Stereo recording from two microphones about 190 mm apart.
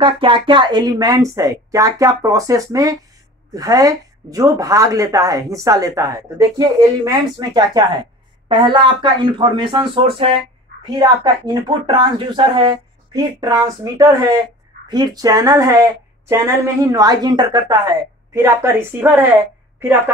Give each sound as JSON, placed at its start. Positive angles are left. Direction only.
{"t": 0.0, "sound": "speech", "side_deg": -25}